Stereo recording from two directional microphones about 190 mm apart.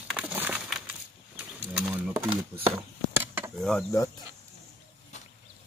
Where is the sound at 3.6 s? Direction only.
5° left (ahead or behind).